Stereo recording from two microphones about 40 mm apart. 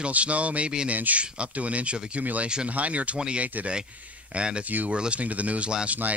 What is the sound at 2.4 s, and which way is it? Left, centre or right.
Speech, right.